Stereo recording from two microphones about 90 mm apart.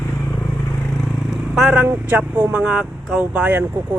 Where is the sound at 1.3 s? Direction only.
5° right (ahead or behind).